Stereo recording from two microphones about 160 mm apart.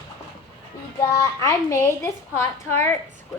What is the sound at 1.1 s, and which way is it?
A woman's voice, 20° left (ahead or behind).